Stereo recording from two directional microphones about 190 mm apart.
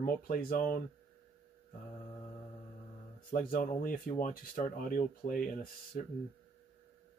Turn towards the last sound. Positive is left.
turn(degrees=50)  # may be behind; listen again after turning